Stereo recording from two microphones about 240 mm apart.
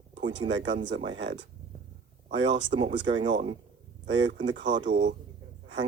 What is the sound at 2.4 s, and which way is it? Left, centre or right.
Speech, right.